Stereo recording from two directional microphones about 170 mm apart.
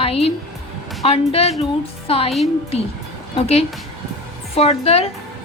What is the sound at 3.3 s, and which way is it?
A woman's voice, 35° left (ahead or behind).